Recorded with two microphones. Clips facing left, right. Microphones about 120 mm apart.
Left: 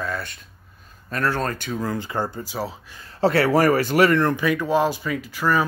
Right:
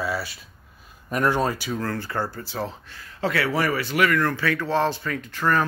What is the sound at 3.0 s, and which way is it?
Speech, 35° left (ahead or behind).